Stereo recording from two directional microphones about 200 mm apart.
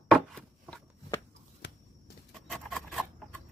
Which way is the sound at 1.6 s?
55° left (ahead or behind).